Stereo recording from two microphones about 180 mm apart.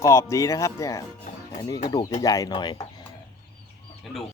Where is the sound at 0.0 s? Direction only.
15° left (ahead or behind).